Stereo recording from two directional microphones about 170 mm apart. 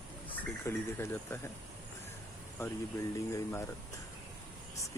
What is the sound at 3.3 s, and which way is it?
Speech, 20° left (ahead or behind).